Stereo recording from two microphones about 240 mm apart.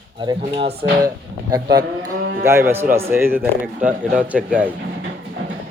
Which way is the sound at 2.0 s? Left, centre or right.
Right.